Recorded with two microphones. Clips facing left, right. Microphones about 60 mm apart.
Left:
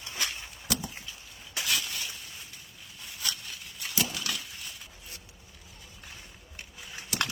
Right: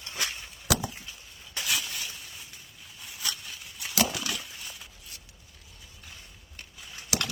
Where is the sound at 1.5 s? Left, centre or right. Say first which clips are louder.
Even; centre.